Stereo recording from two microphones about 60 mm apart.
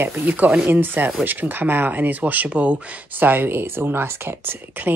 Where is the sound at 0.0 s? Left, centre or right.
Right.